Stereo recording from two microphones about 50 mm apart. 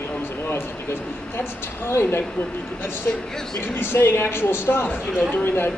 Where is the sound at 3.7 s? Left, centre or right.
Left.